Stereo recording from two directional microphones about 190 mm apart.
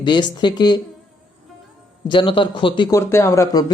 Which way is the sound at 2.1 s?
25° left (ahead or behind).